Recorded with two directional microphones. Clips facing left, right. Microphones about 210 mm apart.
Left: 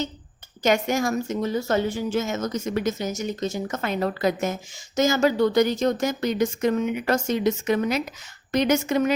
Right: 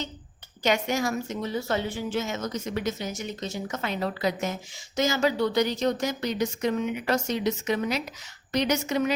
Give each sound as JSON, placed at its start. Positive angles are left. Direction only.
{"t": 0.6, "sound": "speech", "side_deg": 45}